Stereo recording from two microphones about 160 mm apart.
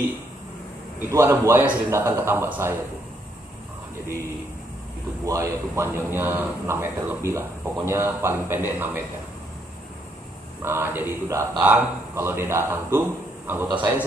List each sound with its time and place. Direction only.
0.9 s speech: 15° right (ahead or behind)
5.2 s speech: 20° right (ahead or behind)
10.6 s a man's voice: 15° right (ahead or behind)